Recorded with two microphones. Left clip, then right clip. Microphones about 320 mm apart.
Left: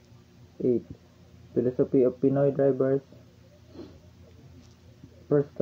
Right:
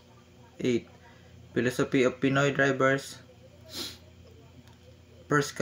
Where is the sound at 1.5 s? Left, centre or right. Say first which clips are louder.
Left 3 dB; right.